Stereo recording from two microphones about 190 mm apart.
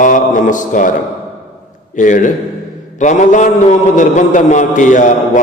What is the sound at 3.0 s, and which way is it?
A man's voice, 40° left (ahead or behind).